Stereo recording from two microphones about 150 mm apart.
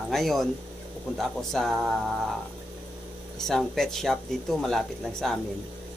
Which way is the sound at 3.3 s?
Centre (ahead or behind).